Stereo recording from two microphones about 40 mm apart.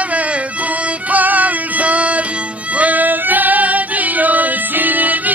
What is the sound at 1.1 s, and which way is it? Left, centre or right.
Music, right.